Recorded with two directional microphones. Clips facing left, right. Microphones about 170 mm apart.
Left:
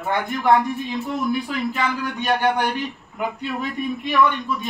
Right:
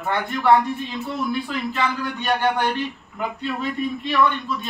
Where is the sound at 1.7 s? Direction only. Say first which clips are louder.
Even; 15° left (ahead or behind).